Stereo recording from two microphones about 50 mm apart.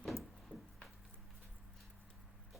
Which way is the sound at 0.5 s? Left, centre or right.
Left.